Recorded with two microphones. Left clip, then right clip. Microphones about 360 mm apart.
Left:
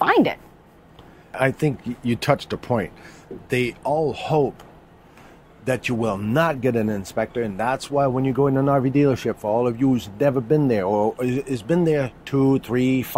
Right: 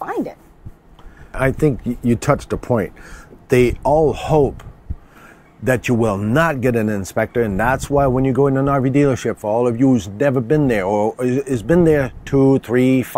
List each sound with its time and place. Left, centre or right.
0.0 s a sound: left
1.3 s speech: centre
3.4 s speech: right
5.6 s speech: right